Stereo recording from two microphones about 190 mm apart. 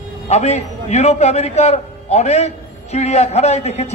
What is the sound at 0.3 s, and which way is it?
A man's voice, 35° left (ahead or behind).